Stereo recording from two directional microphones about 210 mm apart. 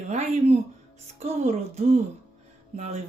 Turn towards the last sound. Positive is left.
turn(degrees=-30)  # may be behind; listen again after turning